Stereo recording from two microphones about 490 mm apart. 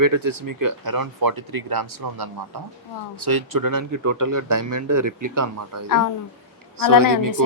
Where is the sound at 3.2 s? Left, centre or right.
Right.